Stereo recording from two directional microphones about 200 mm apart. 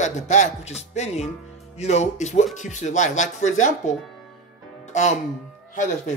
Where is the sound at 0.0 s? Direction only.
35° left (ahead or behind).